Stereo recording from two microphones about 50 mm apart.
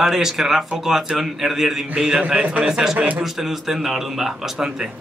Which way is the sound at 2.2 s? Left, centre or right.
Right.